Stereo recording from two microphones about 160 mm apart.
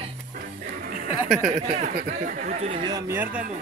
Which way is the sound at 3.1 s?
10° right (ahead or behind).